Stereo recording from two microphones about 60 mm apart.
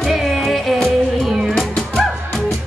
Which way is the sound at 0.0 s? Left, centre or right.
Centre.